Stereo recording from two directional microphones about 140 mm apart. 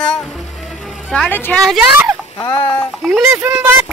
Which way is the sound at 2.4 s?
30° left (ahead or behind).